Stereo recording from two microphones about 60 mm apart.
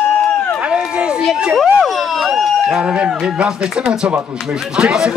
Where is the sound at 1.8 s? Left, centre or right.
Centre.